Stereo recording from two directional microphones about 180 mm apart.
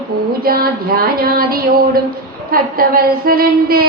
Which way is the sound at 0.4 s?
55° right (ahead or behind).